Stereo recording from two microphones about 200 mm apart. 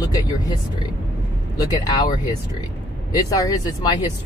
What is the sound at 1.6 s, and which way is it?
Speech, 20° left (ahead or behind).